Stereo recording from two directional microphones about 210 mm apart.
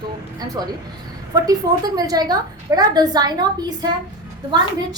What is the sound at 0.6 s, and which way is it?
A woman's voice, 20° right (ahead or behind).